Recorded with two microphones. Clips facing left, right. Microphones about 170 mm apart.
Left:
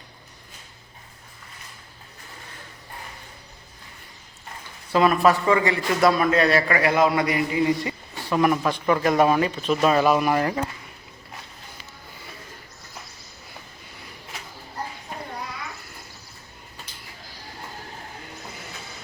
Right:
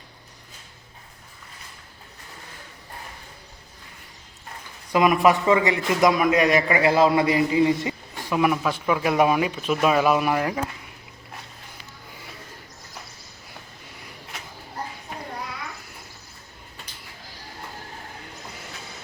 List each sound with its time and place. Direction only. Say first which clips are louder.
4.9 s a man's voice: even; 15° right (ahead or behind)
8.3 s speech: left 1 dB; 5° right (ahead or behind)